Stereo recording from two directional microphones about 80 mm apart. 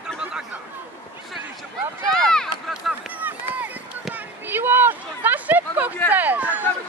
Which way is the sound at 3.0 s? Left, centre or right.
Right.